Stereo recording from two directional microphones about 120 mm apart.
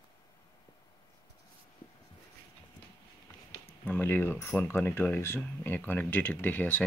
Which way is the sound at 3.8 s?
15° left (ahead or behind).